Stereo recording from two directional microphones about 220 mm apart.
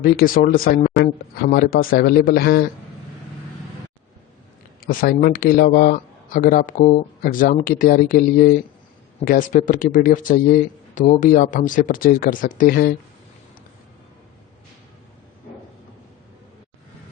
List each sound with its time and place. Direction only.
0.0 s speech: 40° left (ahead or behind)
4.9 s a man's voice: 40° left (ahead or behind)